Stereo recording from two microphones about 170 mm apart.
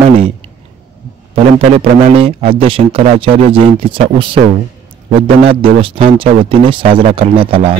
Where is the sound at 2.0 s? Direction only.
35° right (ahead or behind).